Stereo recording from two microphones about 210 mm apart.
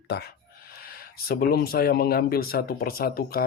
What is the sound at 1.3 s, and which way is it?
Speech, 50° left (ahead or behind).